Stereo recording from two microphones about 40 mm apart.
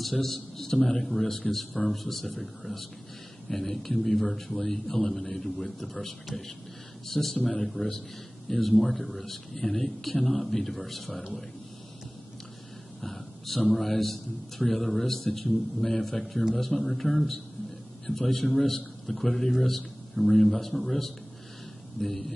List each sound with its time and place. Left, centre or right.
0.0 s a man's voice: centre
13.0 s a sound: centre
13.7 s a man's voice: centre